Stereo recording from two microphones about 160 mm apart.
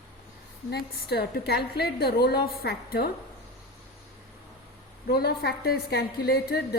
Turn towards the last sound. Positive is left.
turn(degrees=75)  # may be behind; listen again after turning